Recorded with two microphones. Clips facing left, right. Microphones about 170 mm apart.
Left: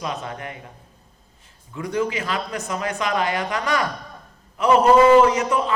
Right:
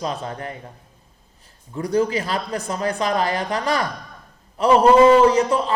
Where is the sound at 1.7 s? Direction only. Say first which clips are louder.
Right 4 dB; 35° right (ahead or behind).